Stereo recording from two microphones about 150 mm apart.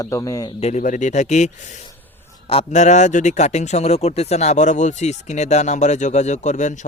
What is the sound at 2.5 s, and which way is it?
Speech, 45° left (ahead or behind).